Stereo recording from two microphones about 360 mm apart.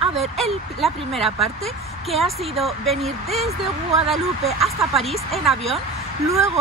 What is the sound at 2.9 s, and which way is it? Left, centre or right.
Speech, centre.